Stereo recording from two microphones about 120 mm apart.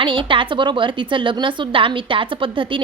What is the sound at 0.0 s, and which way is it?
A woman's voice, 45° right (ahead or behind).